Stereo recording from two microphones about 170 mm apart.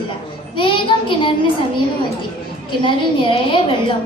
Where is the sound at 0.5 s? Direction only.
30° left (ahead or behind).